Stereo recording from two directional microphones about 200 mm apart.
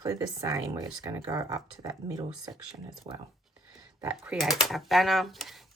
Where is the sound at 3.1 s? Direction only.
30° right (ahead or behind).